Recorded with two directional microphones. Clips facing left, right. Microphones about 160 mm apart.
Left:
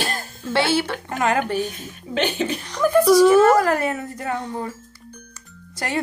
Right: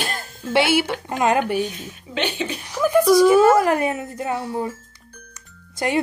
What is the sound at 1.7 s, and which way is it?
Speech, 45° left (ahead or behind).